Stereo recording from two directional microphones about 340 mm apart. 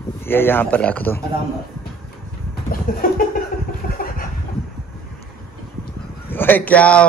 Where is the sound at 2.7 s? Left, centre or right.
Left.